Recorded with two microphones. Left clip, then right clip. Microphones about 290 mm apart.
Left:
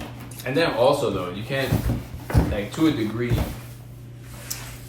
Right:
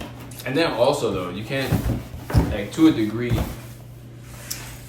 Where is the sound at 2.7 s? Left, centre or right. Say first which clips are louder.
Right 6 dB; centre.